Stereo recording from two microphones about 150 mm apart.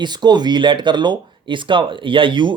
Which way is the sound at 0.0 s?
30° right (ahead or behind).